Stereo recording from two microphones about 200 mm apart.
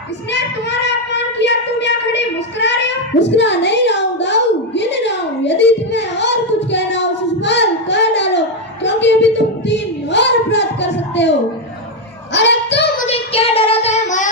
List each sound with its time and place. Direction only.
0.9 s a sound: 60° left (ahead or behind)
12.3 s child singing: 60° left (ahead or behind)
13.0 s child singing: 30° left (ahead or behind)